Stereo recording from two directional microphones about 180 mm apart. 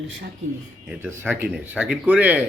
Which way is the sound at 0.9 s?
15° right (ahead or behind).